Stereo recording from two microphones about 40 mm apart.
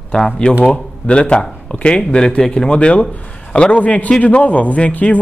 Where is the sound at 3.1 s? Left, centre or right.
Left.